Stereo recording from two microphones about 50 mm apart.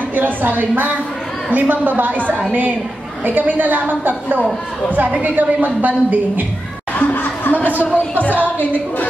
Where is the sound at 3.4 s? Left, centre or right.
Right.